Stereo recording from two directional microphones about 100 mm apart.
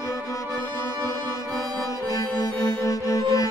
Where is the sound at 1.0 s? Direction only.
40° right (ahead or behind).